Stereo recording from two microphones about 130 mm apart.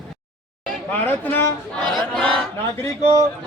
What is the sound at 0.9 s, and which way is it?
Speech, 15° left (ahead or behind).